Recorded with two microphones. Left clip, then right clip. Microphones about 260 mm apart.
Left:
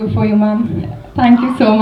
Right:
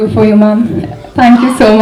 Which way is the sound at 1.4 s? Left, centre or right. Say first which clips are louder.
Right 6 dB; centre.